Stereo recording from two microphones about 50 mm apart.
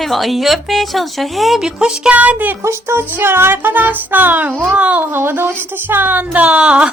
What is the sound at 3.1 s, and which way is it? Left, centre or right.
Music, right.